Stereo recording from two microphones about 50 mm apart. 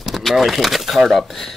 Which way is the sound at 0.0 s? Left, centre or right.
Centre.